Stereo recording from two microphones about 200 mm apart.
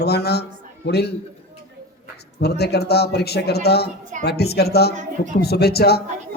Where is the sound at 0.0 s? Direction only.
55° left (ahead or behind).